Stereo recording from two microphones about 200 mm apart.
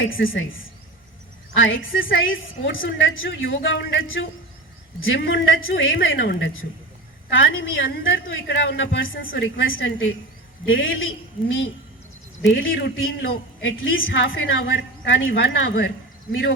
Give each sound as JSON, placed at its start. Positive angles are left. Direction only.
{"t": 1.5, "sound": "a woman's voice", "side_deg": 75}